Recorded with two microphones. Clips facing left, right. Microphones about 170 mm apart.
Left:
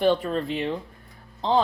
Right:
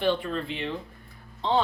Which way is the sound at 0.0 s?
45° left (ahead or behind).